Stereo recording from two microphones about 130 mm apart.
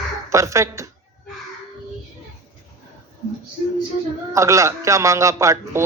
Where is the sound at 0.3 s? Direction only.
25° right (ahead or behind).